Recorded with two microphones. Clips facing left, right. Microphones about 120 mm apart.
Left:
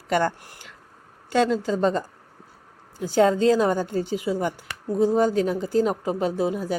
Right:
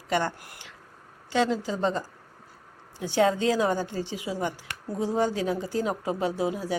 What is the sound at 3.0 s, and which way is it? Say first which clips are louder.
A woman's voice: left 4 dB; 40° left (ahead or behind).